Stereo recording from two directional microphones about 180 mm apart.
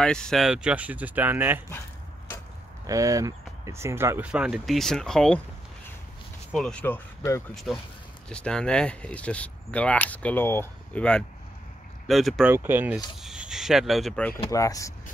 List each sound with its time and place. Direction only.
0.0 s speech: 5° left (ahead or behind)
2.9 s speech: 20° right (ahead or behind); by 5.4 s 5° left (ahead or behind)
6.5 s speech: 5° left (ahead or behind)
7.5 s speech: centre (ahead or behind)
14.5 s speech: 20° left (ahead or behind)